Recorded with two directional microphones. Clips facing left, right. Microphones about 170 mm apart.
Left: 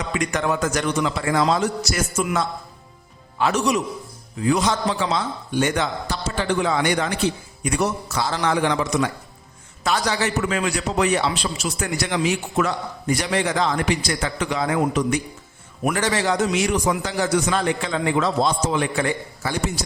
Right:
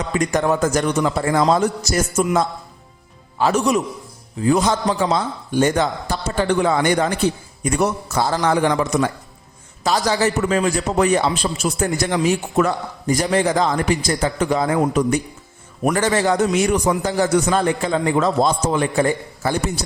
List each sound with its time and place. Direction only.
0.1 s a man's voice: 40° right (ahead or behind)
9.8 s a man's voice: 35° right (ahead or behind)